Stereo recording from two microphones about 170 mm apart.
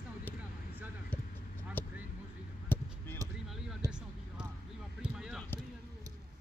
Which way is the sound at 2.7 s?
10° left (ahead or behind).